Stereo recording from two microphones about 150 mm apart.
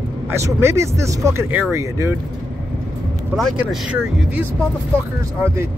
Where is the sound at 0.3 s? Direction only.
15° right (ahead or behind).